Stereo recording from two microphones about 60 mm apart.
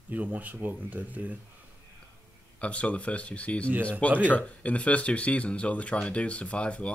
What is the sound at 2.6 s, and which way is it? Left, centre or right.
Speech, left.